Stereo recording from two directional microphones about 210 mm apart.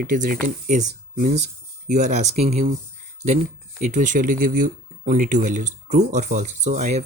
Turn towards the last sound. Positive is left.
turn(degrees=-35)  # may be behind; listen again after turning